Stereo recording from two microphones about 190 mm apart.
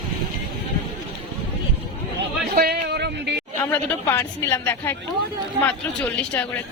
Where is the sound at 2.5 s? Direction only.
55° right (ahead or behind).